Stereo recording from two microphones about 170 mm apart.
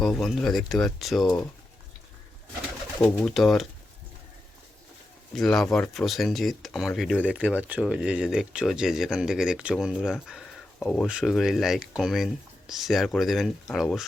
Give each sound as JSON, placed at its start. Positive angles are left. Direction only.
{"t": 0.0, "sound": "speech", "side_deg": 0}
{"t": 3.0, "sound": "speech", "side_deg": 10}
{"t": 5.3, "sound": "speech", "side_deg": 0}